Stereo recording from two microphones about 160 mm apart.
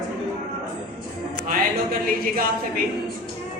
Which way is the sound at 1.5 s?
65° right (ahead or behind).